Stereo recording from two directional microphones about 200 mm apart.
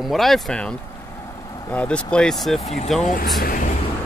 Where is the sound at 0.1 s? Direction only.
Centre (ahead or behind).